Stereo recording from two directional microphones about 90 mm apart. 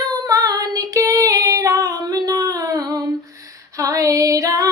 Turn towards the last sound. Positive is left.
turn(degrees=-40)  # may be behind; listen again after turning